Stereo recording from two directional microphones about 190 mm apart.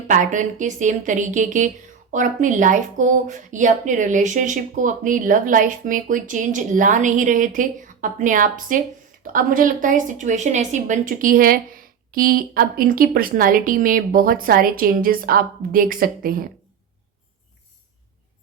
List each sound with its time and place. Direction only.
0.1 s a woman's voice: 40° right (ahead or behind)